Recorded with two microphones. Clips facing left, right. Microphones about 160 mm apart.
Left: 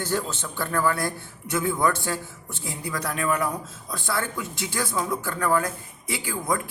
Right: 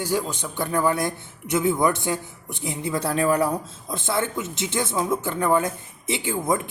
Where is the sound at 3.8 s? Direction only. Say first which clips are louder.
Right 3 dB; 20° right (ahead or behind).